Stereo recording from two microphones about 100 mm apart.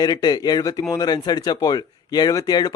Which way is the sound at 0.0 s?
45° left (ahead or behind).